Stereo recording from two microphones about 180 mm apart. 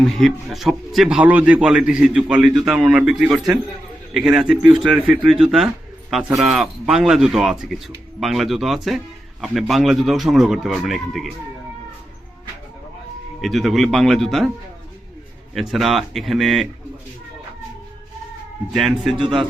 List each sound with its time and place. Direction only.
0.0 s a man's voice: centre (ahead or behind)
13.4 s a man's voice: centre (ahead or behind)
15.5 s a man's voice: centre (ahead or behind)
18.7 s a man's voice: centre (ahead or behind)
19.1 s a man's voice: 30° right (ahead or behind)